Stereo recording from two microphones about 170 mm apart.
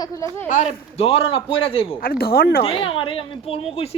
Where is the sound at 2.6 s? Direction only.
30° left (ahead or behind).